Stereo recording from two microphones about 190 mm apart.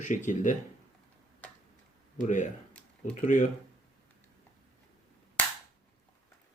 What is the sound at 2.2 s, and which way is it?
Speech, 40° left (ahead or behind).